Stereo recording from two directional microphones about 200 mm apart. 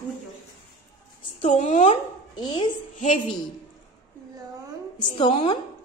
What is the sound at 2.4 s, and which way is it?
Speech, 20° left (ahead or behind).